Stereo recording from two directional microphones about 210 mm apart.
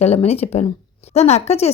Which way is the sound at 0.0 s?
30° left (ahead or behind).